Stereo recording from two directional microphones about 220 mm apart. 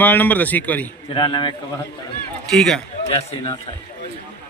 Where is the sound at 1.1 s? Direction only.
20° left (ahead or behind).